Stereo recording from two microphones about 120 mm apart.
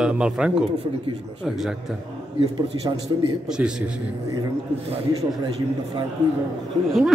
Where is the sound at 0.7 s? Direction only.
45° right (ahead or behind).